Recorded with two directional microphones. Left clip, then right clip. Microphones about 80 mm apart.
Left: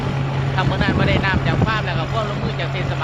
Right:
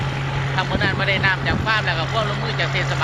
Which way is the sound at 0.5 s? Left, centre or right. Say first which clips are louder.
Left 1 dB; centre.